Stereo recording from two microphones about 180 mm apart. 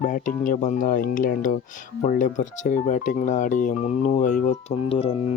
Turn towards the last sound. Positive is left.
turn(degrees=30)  # may be behind; listen again after turning